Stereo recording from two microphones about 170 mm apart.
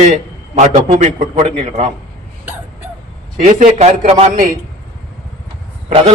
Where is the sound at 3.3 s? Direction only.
45° right (ahead or behind).